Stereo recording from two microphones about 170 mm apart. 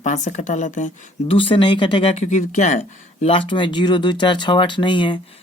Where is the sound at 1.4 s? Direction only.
30° left (ahead or behind).